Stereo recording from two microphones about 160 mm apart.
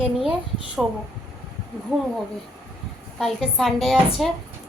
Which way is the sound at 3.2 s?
Centre (ahead or behind).